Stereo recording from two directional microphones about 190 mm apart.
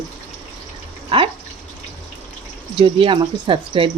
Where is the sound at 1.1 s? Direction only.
30° right (ahead or behind).